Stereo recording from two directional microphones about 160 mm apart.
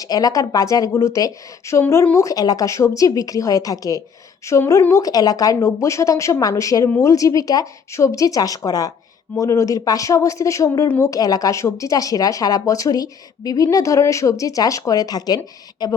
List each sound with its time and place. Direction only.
0.0 s speech: 25° left (ahead or behind)